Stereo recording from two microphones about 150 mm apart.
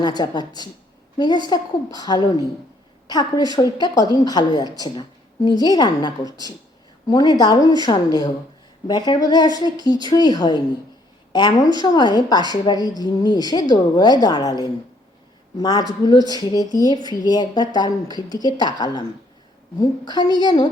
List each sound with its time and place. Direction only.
0.0 s a woman's voice: 30° left (ahead or behind)
6.2 s speech: 25° right (ahead or behind)
7.1 s a woman's voice: 25° left (ahead or behind)